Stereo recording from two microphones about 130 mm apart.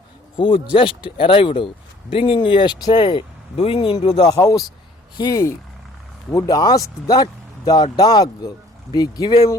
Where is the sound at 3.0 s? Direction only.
45° left (ahead or behind).